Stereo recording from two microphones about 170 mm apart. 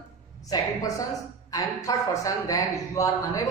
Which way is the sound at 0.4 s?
20° left (ahead or behind).